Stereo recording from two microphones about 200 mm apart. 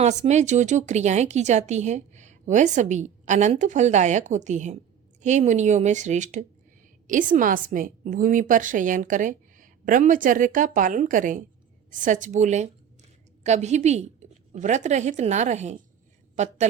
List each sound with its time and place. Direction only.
0.0 s a woman's voice: 35° right (ahead or behind)